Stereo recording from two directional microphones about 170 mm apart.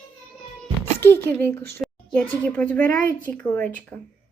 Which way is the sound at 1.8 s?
5° left (ahead or behind).